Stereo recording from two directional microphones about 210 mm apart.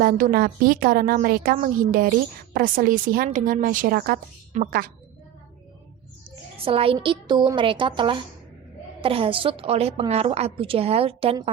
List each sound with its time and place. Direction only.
0.0 s a woman's voice: 40° right (ahead or behind)
6.7 s a woman's voice: 25° right (ahead or behind)